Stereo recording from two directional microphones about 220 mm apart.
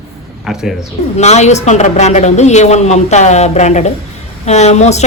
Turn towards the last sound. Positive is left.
turn(degrees=30)  # may be behind; listen again after turning